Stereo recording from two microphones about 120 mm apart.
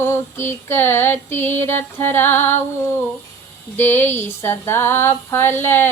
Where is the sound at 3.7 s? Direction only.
20° left (ahead or behind).